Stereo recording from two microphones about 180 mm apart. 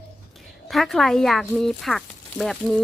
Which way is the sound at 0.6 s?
Centre (ahead or behind).